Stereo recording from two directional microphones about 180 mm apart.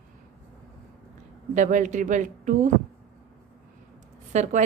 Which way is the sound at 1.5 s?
45° right (ahead or behind).